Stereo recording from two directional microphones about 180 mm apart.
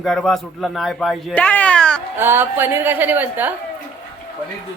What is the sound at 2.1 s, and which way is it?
A woman's voice, 10° right (ahead or behind).